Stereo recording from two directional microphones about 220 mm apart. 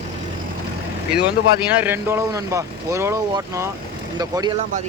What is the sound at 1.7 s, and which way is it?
Speech, 10° right (ahead or behind).